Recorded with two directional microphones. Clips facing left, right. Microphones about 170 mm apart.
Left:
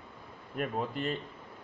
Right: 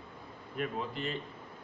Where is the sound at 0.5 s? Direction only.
50° left (ahead or behind).